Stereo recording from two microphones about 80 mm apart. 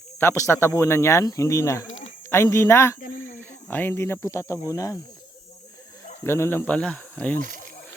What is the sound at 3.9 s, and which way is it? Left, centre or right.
Speech, left.